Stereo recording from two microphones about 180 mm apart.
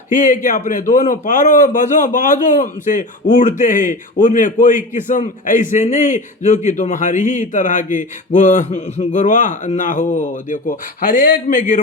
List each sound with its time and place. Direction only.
0.1 s a man's voice: 45° left (ahead or behind)